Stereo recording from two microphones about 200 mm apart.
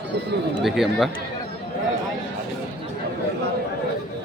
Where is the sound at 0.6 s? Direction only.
Centre (ahead or behind).